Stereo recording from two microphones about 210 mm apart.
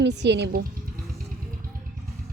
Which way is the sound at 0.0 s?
55° right (ahead or behind).